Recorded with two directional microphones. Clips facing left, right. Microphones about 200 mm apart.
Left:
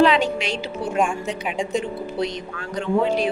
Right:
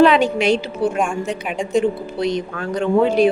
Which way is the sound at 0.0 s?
55° right (ahead or behind).